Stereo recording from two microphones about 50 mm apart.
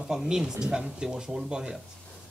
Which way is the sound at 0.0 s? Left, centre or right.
Centre.